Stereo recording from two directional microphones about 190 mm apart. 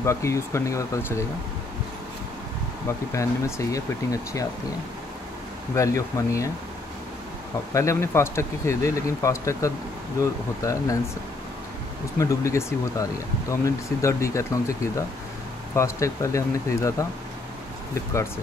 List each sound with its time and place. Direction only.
0.0 s speech: 15° left (ahead or behind)
2.9 s speech: 15° left (ahead or behind)
5.8 s speech: 15° left (ahead or behind)
7.7 s speech: 15° left (ahead or behind)
12.2 s speech: 15° left (ahead or behind)